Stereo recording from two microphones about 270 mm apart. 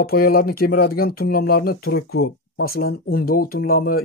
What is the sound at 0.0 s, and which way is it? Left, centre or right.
Speech, left.